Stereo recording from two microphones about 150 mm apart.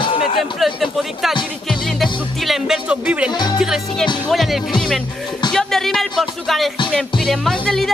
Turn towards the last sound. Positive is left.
turn(degrees=5)  # may be behind; listen again after turning